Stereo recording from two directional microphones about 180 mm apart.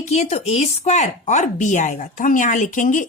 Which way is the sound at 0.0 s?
35° left (ahead or behind).